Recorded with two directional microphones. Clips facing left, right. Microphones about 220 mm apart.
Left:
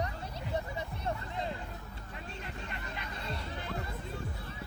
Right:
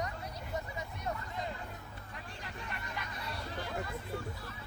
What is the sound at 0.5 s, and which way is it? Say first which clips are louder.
Music: left 4 dB; 30° left (ahead or behind).